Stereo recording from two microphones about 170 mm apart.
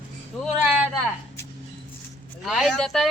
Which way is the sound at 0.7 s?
5° right (ahead or behind).